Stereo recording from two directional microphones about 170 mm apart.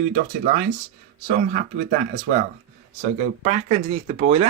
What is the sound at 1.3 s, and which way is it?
Speech, 50° right (ahead or behind).